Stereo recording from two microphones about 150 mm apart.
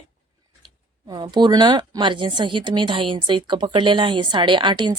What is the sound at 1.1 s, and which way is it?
A woman's voice, 30° right (ahead or behind).